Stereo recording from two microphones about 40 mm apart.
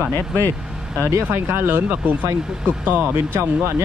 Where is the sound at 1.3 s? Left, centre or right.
Right.